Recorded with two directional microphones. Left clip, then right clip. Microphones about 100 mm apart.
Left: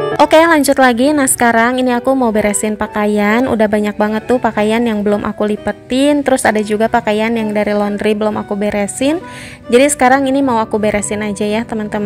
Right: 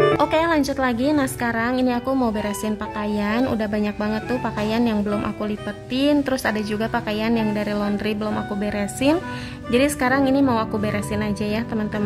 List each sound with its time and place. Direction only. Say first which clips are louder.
0.2 s a woman's voice: left 11 dB; 50° left (ahead or behind)